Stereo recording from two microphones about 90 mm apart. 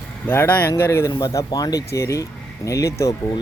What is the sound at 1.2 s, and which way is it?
Speech, 40° left (ahead or behind).